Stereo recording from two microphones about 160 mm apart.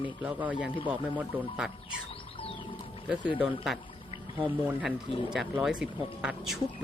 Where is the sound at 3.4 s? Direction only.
5° right (ahead or behind).